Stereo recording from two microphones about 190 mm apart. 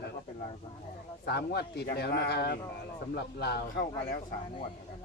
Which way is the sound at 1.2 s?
60° left (ahead or behind).